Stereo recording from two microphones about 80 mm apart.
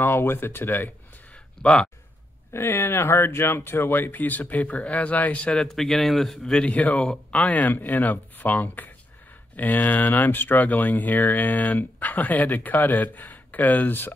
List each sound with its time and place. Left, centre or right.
0.0 s speech: left
1.6 s speech: centre
2.5 s speech: left
4.1 s speech: left
4.7 s speech: centre
5.0 s speech: centre
5.6 s speech: centre
7.5 s speech: left